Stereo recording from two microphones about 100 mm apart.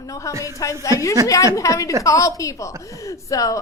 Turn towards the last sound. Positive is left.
turn(degrees=35)  # may be behind; listen again after turning